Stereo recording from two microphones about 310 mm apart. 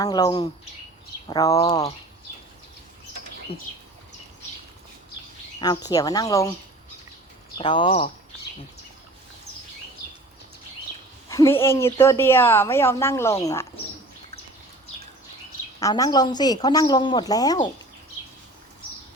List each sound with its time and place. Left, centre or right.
0.0 s a woman's voice: centre
5.5 s a woman's voice: centre
7.6 s a woman's voice: centre
11.3 s a woman's voice: centre
15.8 s a woman's voice: centre